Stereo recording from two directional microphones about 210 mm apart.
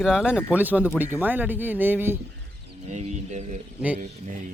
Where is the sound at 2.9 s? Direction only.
35° right (ahead or behind).